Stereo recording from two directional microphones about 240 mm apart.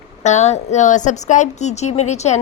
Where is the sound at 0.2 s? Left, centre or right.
Left.